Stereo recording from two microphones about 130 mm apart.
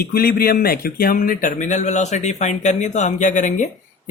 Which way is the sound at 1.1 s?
90° left.